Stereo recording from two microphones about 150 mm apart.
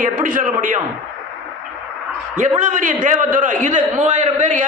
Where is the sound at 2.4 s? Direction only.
55° right (ahead or behind).